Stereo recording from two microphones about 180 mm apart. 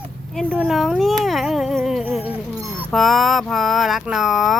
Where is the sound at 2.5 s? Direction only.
15° right (ahead or behind).